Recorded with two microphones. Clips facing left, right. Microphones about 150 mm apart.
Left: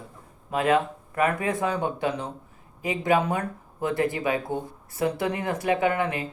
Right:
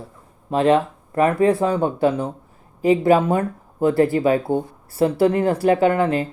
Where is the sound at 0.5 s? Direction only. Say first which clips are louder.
Right 6 dB; 30° right (ahead or behind).